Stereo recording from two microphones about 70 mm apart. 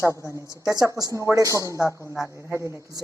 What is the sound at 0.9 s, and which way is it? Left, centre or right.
Speech, right.